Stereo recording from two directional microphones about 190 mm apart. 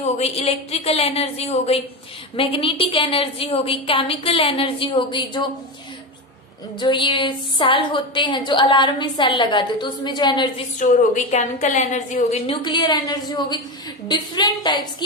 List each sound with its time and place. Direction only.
0.0 s a woman's voice: 30° left (ahead or behind)
6.8 s a woman's voice: 25° left (ahead or behind)
10.8 s a woman's voice: 40° left (ahead or behind)
12.4 s a woman's voice: 25° left (ahead or behind)